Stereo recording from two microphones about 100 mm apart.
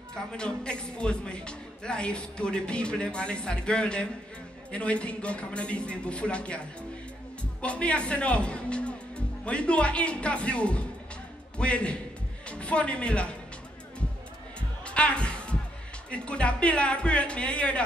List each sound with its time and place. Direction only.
0.1 s speech: 10° left (ahead or behind)
7.6 s speech: 10° left (ahead or behind)
14.9 s music: 10° left (ahead or behind)
16.1 s speech: 10° left (ahead or behind)